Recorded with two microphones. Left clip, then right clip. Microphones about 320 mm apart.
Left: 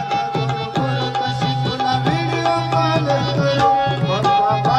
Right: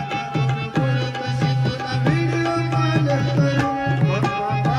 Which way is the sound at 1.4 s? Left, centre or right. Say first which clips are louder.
Left 5 dB; centre.